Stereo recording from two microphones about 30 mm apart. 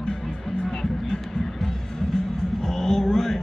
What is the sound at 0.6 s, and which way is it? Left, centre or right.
Music, centre.